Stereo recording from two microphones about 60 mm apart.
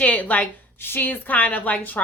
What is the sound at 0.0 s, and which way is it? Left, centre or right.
A woman's voice, left.